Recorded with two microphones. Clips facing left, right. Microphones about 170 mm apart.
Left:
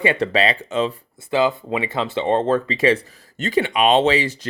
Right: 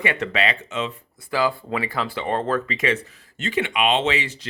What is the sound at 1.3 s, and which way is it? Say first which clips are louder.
Speech: left 4 dB; 20° left (ahead or behind).